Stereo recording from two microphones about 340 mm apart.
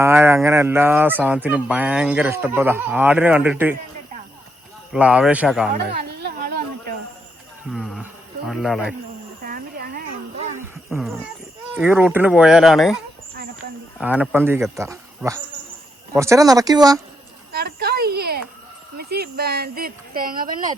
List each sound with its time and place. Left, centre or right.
0.0 s speech: centre
4.9 s speech: centre
5.9 s music: right
7.7 s a sound: centre
8.4 s speech: centre
9.4 s a sound: right
10.8 s speech: centre
14.0 s speech: centre
17.5 s a sound: right
18.9 s speech: right